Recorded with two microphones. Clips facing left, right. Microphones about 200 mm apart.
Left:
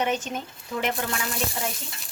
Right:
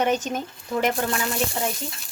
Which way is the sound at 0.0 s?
40° right (ahead or behind).